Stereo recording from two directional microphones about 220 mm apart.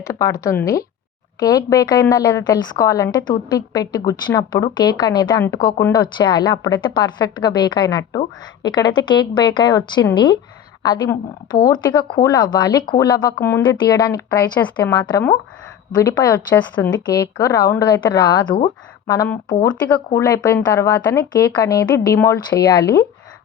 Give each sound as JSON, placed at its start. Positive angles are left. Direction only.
{"t": 0.0, "sound": "a woman's voice", "side_deg": 15}
{"t": 19.5, "sound": "speech", "side_deg": 25}
{"t": 20.1, "sound": "a woman's voice", "side_deg": 10}